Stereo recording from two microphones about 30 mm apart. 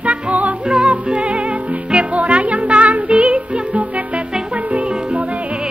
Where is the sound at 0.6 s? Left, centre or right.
Right.